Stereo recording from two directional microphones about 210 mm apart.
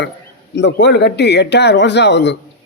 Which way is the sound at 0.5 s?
55° left (ahead or behind).